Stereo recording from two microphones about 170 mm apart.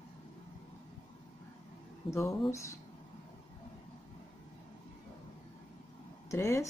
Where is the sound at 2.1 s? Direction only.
15° left (ahead or behind).